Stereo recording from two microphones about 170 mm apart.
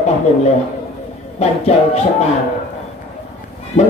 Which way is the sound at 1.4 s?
40° left (ahead or behind).